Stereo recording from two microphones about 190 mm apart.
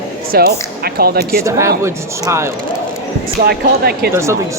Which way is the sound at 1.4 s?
15° right (ahead or behind).